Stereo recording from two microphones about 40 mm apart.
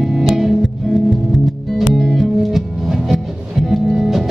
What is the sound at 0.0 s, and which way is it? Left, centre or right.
Music, centre.